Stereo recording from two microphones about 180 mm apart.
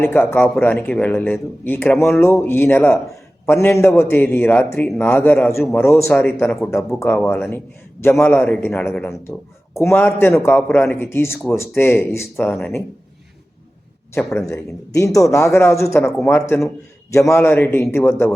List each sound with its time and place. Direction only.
0.0 s speech: 10° left (ahead or behind)
14.1 s speech: 10° left (ahead or behind)